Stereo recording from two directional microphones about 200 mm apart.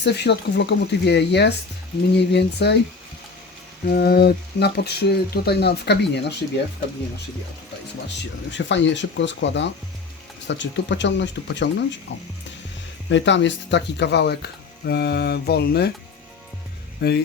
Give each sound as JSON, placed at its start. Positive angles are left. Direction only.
{"t": 0.0, "sound": "speech", "side_deg": 55}
{"t": 3.8, "sound": "speech", "side_deg": 50}
{"t": 8.5, "sound": "speech", "side_deg": 65}
{"t": 13.1, "sound": "speech", "side_deg": 65}
{"t": 17.0, "sound": "speech", "side_deg": 55}